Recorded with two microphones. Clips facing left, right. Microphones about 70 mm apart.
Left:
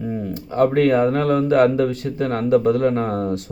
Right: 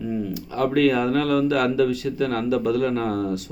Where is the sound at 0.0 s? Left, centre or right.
Left.